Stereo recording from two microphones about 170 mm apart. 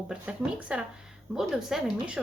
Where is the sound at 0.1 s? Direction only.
5° right (ahead or behind).